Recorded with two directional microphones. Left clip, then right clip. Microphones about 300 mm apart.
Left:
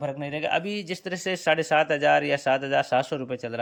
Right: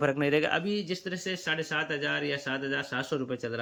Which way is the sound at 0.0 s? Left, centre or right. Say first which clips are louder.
Right 3 dB; centre.